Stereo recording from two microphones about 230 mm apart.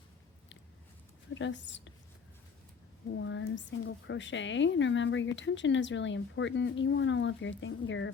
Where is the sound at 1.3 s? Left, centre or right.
Left.